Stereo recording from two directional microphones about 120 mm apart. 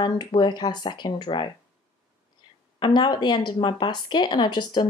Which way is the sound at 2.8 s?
40° left (ahead or behind).